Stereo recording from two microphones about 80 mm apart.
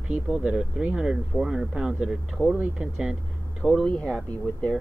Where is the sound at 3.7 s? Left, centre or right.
Centre.